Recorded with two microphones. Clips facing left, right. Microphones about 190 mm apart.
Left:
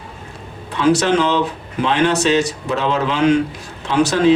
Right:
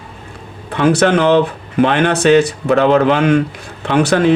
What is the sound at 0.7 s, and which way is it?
Speech, 55° right (ahead or behind).